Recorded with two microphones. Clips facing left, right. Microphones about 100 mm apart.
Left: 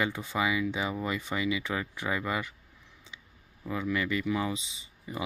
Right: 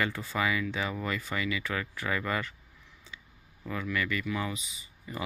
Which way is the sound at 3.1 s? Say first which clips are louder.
Right 1 dB; 20° left (ahead or behind).